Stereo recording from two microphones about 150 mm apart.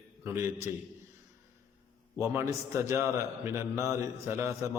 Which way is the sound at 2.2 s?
15° right (ahead or behind).